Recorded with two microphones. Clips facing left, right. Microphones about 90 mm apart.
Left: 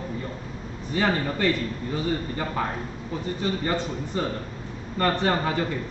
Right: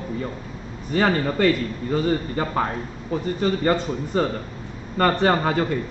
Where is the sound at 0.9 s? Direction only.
55° right (ahead or behind).